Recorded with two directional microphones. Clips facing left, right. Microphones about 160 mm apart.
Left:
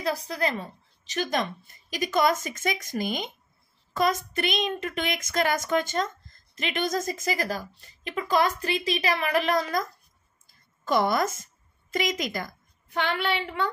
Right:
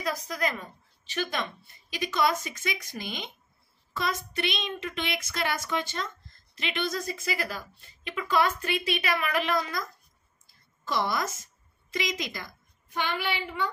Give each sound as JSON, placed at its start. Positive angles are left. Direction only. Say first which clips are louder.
{"t": 0.0, "sound": "a woman's voice", "louder": "left 3 dB", "side_deg": 35}
{"t": 10.4, "sound": "a sound", "louder": "left 2 dB", "side_deg": 50}
{"t": 11.9, "sound": "a woman's voice", "louder": "left 4 dB", "side_deg": 50}